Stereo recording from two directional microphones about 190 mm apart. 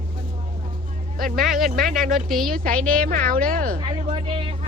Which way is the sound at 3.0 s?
50° right (ahead or behind).